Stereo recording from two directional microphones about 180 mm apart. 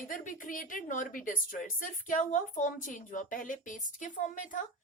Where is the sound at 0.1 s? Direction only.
50° left (ahead or behind).